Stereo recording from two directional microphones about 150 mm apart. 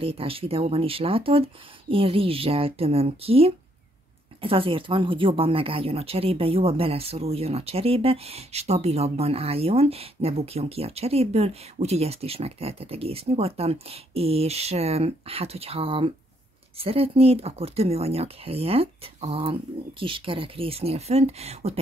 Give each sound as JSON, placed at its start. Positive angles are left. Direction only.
{"t": 0.0, "sound": "speech", "side_deg": -40}